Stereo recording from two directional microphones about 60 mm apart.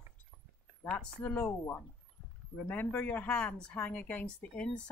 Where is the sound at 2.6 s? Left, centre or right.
Left.